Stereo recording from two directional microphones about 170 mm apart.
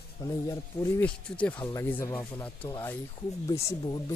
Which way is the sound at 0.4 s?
20° left (ahead or behind).